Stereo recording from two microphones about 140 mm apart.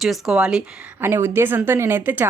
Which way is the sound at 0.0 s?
Centre (ahead or behind).